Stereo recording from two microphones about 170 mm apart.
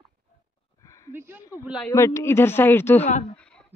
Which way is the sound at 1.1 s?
10° right (ahead or behind).